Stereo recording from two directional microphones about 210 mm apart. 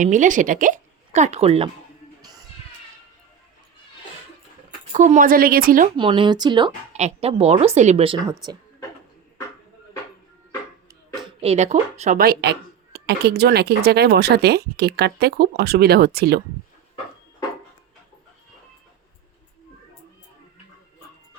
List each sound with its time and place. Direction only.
0.0 s speech: 35° right (ahead or behind)
4.9 s speech: 35° right (ahead or behind)
6.0 s speech: 25° right (ahead or behind)
11.3 s speech: 30° right (ahead or behind); by 16.4 s 50° right (ahead or behind)